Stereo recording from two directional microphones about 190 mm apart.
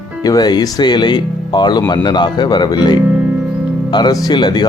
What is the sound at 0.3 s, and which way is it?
Speech, 20° left (ahead or behind).